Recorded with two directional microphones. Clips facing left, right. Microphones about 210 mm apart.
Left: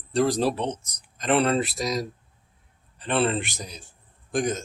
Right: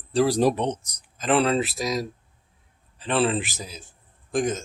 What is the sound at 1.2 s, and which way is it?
Speech, centre (ahead or behind).